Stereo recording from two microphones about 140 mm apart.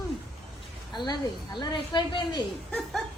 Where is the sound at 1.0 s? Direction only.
35° left (ahead or behind).